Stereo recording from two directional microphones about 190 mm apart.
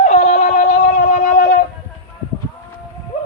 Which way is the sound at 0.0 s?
35° left (ahead or behind).